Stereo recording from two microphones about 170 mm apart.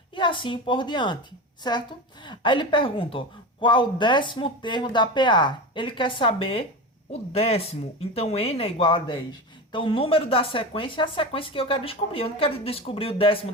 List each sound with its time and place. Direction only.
0.2 s speech: 30° left (ahead or behind)
2.2 s speech: 30° left (ahead or behind)